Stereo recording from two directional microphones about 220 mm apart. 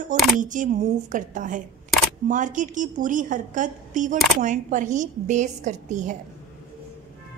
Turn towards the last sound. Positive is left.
turn(degrees=-35)  # may be behind; listen again after turning